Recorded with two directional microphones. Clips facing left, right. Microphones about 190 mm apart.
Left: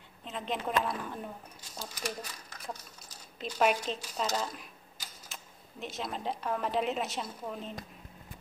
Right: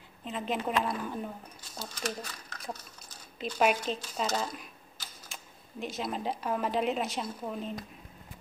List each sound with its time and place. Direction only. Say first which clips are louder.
0.2 s speech: right 3 dB; 5° right (ahead or behind)
1.8 s speech: right 2 dB; 15° left (ahead or behind)
3.3 s speech: right 1 dB; 5° right (ahead or behind)
5.3 s speech: right 3 dB; centre (ahead or behind)